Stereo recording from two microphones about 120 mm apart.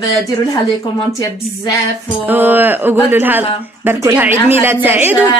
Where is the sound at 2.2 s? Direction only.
15° right (ahead or behind).